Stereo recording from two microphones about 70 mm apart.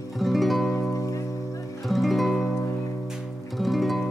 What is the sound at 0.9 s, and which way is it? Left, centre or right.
Music, left.